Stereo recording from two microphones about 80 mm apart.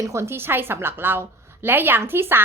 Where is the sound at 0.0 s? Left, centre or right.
Right.